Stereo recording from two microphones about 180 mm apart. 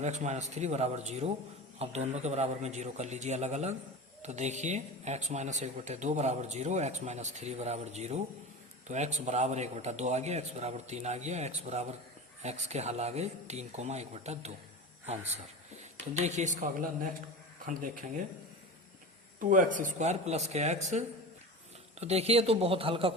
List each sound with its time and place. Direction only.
0.0 s speech: 40° right (ahead or behind)
19.4 s speech: 45° right (ahead or behind)
22.0 s speech: 35° right (ahead or behind)